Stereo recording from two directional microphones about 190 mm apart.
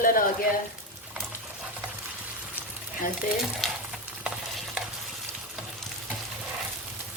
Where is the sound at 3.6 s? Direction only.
Centre (ahead or behind).